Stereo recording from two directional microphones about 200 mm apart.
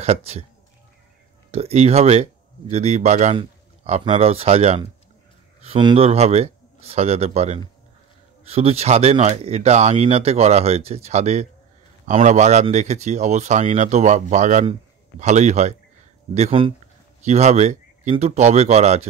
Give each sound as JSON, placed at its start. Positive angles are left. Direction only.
{"t": 0.0, "sound": "speech", "side_deg": -30}
{"t": 1.5, "sound": "speech", "side_deg": -30}